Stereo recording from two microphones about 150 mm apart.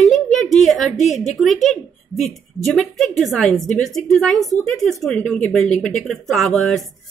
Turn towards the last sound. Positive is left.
turn(degrees=0)  # may be behind; listen again after turning